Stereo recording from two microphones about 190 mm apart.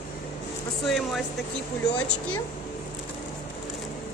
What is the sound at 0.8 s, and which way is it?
Speech, centre (ahead or behind).